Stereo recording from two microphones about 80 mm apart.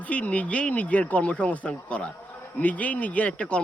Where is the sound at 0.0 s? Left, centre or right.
Centre.